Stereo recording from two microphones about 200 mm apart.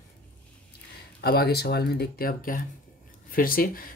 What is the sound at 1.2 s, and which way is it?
Speech, 50° left (ahead or behind).